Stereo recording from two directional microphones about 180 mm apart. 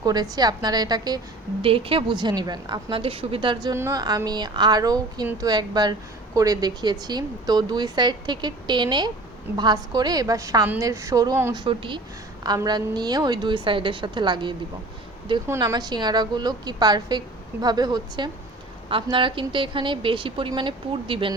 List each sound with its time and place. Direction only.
0.0 s a woman's voice: 20° right (ahead or behind)
11.6 s a woman's voice: 30° right (ahead or behind)